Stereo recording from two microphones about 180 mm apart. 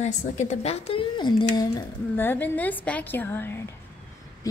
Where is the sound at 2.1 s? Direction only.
10° left (ahead or behind).